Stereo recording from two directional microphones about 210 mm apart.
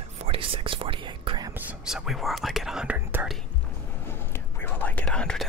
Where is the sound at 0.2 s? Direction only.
25° right (ahead or behind).